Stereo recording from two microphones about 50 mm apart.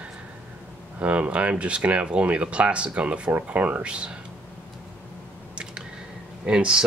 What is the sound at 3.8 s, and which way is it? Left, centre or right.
Speech, right.